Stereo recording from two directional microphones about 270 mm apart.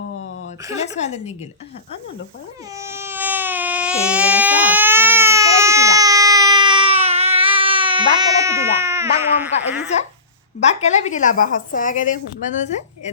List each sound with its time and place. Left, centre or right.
0.8 s a woman's voice: left
2.7 s baby cry: centre
9.6 s speech: centre
10.6 s a woman's voice: left